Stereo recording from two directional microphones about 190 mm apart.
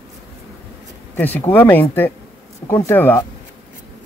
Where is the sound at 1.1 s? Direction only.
10° left (ahead or behind).